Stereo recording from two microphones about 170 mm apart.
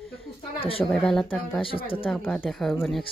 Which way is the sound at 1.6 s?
30° left (ahead or behind).